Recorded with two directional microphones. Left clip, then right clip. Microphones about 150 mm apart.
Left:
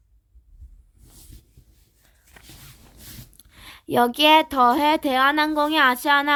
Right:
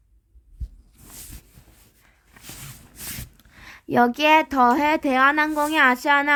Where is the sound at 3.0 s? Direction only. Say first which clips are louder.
Right 9 dB; 75° right (ahead or behind).